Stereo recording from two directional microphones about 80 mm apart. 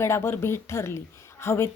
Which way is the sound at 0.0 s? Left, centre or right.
Left.